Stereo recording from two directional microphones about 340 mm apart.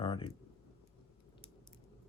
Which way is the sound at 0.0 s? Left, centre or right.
Centre.